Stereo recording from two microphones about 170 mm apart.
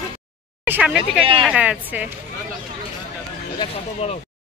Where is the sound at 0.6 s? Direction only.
5° right (ahead or behind).